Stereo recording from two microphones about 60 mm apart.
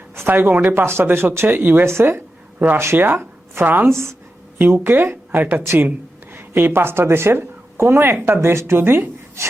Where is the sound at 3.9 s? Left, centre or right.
Right.